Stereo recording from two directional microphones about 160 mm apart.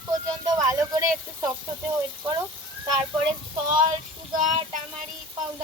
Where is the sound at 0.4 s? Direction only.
20° right (ahead or behind).